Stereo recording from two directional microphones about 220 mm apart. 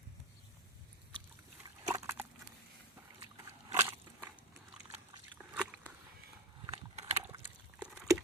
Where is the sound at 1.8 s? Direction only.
15° right (ahead or behind).